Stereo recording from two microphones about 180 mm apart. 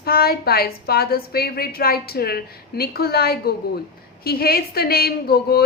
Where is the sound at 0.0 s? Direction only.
60° left (ahead or behind).